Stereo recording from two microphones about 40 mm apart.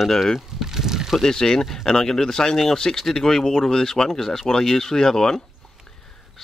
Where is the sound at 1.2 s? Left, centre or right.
Centre.